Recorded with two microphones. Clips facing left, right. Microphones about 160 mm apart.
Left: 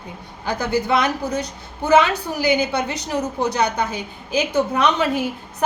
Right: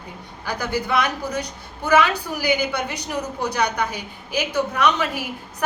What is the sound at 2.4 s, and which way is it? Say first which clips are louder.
A woman's voice: left 3 dB; 25° left (ahead or behind).